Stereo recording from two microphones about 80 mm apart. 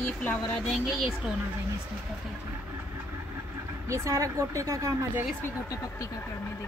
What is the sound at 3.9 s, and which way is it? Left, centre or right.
Speech, right.